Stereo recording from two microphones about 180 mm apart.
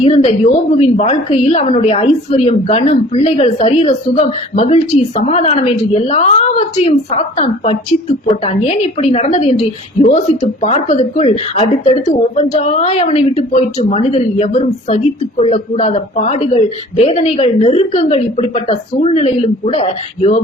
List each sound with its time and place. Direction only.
0.0 s a woman's voice: 35° left (ahead or behind)